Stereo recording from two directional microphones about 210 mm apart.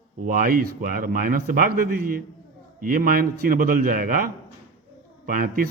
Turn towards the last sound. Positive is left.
turn(degrees=-45)  # may be behind; listen again after turning